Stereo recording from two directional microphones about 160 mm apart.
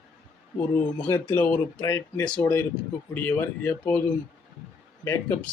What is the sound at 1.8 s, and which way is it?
Speech, 20° left (ahead or behind).